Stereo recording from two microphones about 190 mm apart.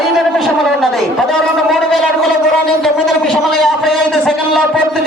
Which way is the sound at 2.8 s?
Centre (ahead or behind).